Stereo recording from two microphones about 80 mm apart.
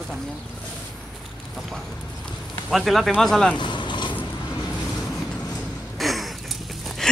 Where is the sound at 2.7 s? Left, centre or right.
Centre.